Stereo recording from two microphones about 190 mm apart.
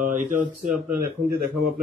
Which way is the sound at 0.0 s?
45° right (ahead or behind).